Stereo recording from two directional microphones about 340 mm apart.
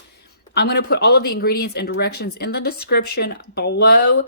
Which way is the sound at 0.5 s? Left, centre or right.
Left.